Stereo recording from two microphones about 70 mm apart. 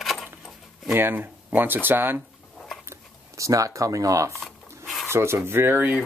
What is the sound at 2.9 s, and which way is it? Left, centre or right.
Speech, right.